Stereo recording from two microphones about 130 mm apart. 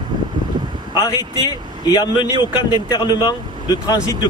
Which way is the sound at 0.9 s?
25° left (ahead or behind).